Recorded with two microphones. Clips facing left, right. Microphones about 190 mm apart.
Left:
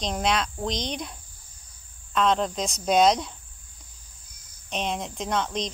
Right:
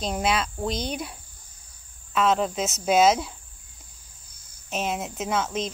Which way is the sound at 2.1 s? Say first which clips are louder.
Right 1 dB; 5° right (ahead or behind).